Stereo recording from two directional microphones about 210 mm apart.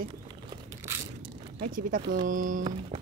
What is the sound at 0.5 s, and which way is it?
Crushing, 15° right (ahead or behind).